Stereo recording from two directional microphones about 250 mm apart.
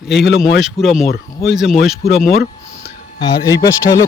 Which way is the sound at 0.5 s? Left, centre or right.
Centre.